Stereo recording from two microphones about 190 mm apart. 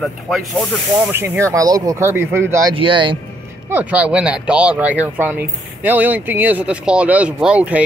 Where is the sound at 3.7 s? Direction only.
10° right (ahead or behind).